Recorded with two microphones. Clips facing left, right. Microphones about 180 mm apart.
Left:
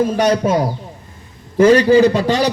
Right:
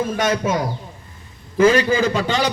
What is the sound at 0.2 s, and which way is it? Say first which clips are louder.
A man's voice: left 5 dB; 35° left (ahead or behind).